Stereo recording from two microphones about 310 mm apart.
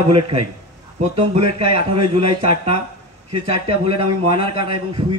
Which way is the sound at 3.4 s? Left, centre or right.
Centre.